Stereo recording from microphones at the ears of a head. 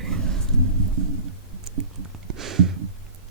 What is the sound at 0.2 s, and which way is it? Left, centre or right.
Rain, right.